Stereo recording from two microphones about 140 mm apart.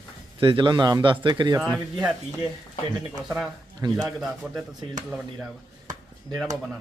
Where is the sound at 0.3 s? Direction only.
35° right (ahead or behind).